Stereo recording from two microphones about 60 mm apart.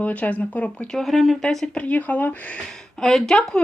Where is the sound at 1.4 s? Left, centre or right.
Centre.